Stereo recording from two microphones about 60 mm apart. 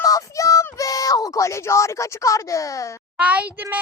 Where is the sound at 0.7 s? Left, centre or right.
Left.